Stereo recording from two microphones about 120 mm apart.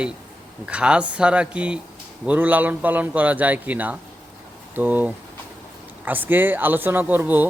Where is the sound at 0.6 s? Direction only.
10° right (ahead or behind).